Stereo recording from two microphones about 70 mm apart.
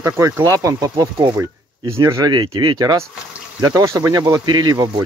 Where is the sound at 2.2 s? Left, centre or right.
Right.